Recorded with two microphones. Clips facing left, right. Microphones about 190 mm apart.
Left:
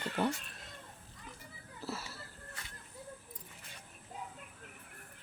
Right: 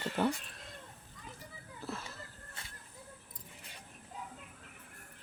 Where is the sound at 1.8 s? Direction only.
5° left (ahead or behind).